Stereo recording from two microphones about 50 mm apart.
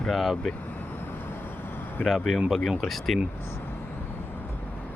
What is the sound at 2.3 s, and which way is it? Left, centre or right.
Speech, centre.